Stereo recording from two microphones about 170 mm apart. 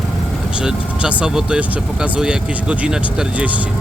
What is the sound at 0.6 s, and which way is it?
Speech, 5° right (ahead or behind).